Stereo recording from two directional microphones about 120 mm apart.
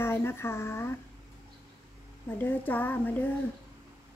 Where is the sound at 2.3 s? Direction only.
15° left (ahead or behind).